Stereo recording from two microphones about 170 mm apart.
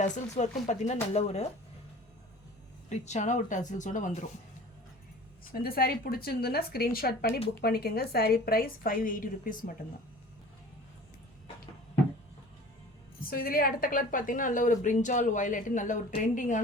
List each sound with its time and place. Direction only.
0.0 s a woman's voice: 45° left (ahead or behind)
2.9 s a woman's voice: 45° left (ahead or behind)
5.5 s a woman's voice: 60° left (ahead or behind)
13.3 s a woman's voice: 60° left (ahead or behind)